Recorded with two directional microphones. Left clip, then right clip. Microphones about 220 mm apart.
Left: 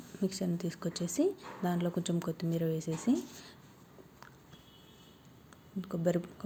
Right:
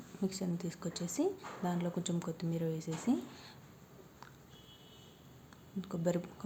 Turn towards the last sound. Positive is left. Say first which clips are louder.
# left 3 dB
turn(degrees=10)  # may be behind; listen again after turning